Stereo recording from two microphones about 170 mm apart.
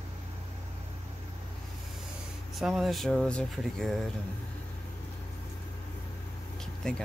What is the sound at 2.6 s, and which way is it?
Speech, centre (ahead or behind).